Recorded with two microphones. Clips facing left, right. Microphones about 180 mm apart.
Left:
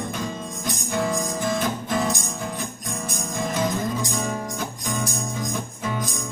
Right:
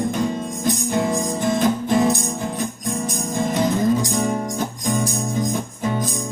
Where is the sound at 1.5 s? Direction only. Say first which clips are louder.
Right 9 dB; 25° right (ahead or behind).